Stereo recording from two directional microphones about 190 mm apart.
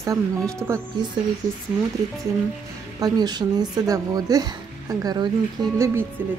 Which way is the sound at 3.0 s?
20° right (ahead or behind).